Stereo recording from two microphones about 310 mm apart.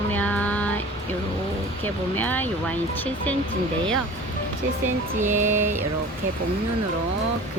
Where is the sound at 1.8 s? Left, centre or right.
Centre.